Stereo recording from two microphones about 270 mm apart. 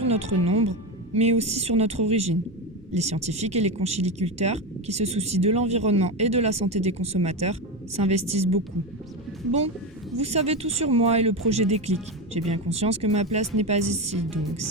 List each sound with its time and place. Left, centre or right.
0.1 s speech: right
10.2 s speech: right